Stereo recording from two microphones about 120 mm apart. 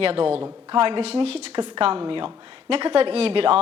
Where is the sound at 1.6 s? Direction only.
45° right (ahead or behind).